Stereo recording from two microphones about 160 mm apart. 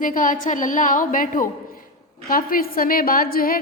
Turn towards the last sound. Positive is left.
turn(degrees=65)  # may be behind; listen again after turning